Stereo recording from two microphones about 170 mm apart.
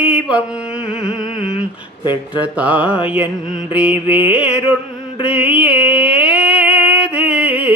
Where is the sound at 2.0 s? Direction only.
25° left (ahead or behind).